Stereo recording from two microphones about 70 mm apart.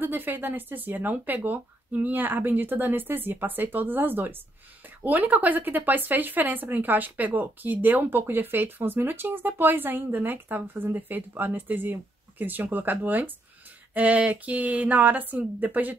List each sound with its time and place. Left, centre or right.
0.0 s speech: right